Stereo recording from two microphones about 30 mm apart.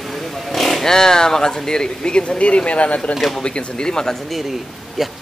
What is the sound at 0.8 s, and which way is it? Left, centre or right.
Speech, left.